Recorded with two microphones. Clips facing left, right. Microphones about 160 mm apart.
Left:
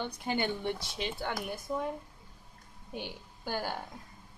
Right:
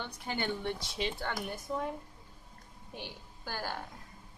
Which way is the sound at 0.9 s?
Centre (ahead or behind).